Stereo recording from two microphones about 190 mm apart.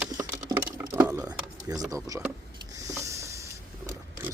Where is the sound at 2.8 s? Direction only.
15° right (ahead or behind).